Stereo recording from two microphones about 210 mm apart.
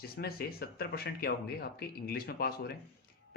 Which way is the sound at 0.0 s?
45° left (ahead or behind).